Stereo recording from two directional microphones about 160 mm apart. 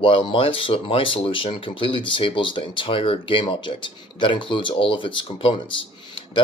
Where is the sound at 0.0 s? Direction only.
30° left (ahead or behind).